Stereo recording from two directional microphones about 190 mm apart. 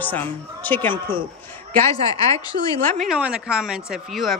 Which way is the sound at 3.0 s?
5° right (ahead or behind).